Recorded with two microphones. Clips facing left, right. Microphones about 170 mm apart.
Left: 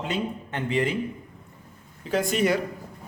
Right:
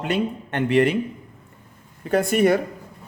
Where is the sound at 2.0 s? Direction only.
55° right (ahead or behind).